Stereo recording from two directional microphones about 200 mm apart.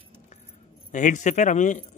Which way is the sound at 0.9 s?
40° left (ahead or behind).